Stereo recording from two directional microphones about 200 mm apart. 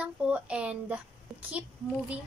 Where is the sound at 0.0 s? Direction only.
5° right (ahead or behind).